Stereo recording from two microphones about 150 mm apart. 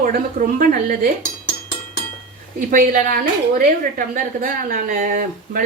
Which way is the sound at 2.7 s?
65° right (ahead or behind).